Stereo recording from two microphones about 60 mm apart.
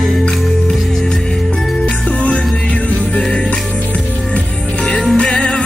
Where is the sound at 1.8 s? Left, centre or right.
Left.